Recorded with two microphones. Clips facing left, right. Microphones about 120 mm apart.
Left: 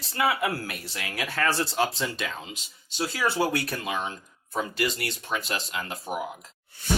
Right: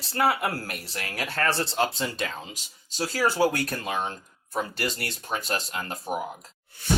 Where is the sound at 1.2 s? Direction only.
30° right (ahead or behind).